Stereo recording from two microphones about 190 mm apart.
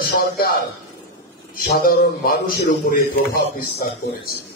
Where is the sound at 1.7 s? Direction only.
50° left (ahead or behind).